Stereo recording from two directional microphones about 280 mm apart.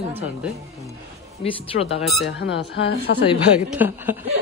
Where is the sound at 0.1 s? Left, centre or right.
Centre.